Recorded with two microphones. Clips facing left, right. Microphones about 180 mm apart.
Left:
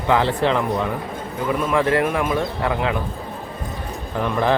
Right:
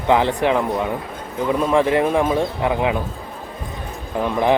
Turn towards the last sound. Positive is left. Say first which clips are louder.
# right 2 dB
turn(degrees=-15)  # may be behind; listen again after turning